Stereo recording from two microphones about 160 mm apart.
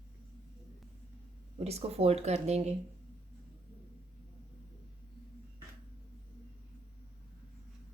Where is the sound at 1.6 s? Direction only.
40° right (ahead or behind).